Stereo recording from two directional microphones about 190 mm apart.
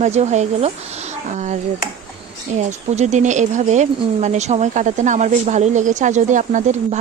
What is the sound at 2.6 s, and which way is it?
Speech, 35° right (ahead or behind).